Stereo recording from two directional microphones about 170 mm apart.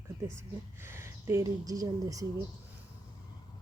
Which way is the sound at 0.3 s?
15° right (ahead or behind).